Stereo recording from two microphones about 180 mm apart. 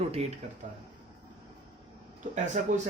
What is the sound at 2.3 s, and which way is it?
Speech, 40° right (ahead or behind).